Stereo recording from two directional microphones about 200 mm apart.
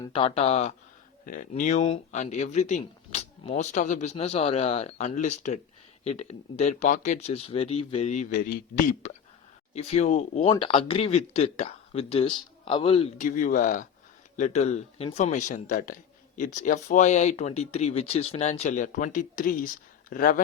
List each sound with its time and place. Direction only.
0.0 s speech: 25° left (ahead or behind)
13.1 s speech: 40° left (ahead or behind)